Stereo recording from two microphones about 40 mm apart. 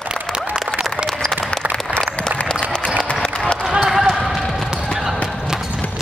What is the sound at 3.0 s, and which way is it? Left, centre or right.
Applause, left.